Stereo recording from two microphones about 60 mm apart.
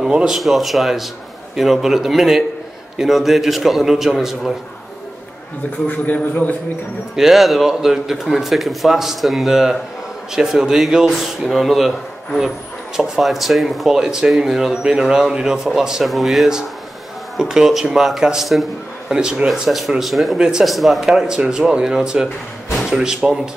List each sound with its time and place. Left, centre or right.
0.3 s speech: centre
5.9 s a man's voice: left
7.2 s speech: centre
11.4 s speech: centre
19.1 s speech: centre
20.3 s speech: centre
20.6 s speech: centre